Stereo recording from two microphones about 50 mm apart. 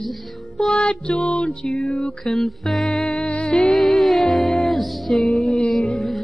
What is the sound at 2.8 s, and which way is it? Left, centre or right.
Music, left.